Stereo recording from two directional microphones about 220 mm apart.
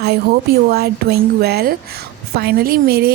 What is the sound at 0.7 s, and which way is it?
A woman's voice, 45° right (ahead or behind).